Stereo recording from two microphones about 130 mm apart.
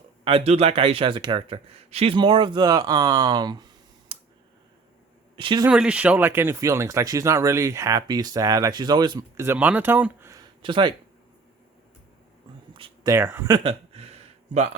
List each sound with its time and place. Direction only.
0.3 s speech: 45° right (ahead or behind)
4.1 s a sound: 40° right (ahead or behind)
5.4 s speech: 40° right (ahead or behind)
5.6 s speech: 5° right (ahead or behind); by 9.2 s 35° right (ahead or behind)
9.4 s speech: 15° right (ahead or behind)
10.6 s speech: 40° right (ahead or behind)
12.7 s a sound: 40° right (ahead or behind)
13.1 s speech: 20° right (ahead or behind)
13.7 s a sound: 50° right (ahead or behind)